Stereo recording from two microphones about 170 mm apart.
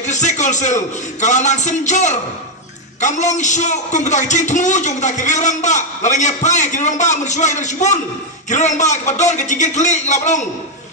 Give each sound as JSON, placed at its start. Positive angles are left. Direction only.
{"t": 0.0, "sound": "speech", "side_deg": 45}